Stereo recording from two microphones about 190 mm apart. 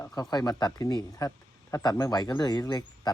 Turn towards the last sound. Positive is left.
turn(degrees=20)  # may be behind; listen again after turning